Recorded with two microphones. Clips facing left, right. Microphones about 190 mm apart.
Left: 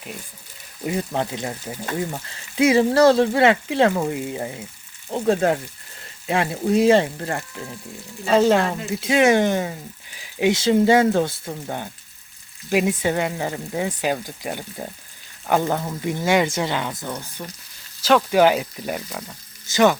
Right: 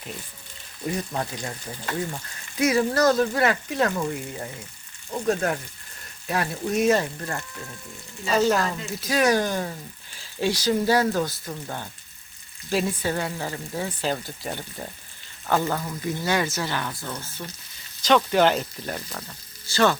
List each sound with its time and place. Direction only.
0.9 s speech: 25° left (ahead or behind)
15.6 s speech: 25° left (ahead or behind)